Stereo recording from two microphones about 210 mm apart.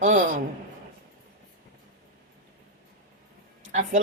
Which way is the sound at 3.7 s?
35° right (ahead or behind).